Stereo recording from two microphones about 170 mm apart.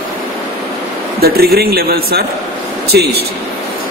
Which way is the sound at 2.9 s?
75° right (ahead or behind).